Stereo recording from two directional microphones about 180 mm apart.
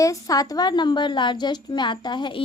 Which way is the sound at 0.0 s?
20° left (ahead or behind).